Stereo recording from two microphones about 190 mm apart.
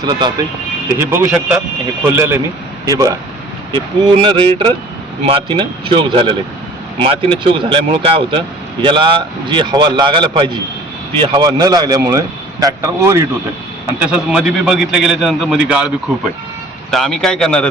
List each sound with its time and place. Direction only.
0.0 s speech: 20° right (ahead or behind)
0.9 s a man's voice: 10° right (ahead or behind)
16.9 s a man's voice: centre (ahead or behind)